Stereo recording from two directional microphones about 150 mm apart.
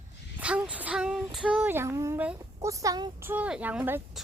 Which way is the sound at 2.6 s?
20° right (ahead or behind).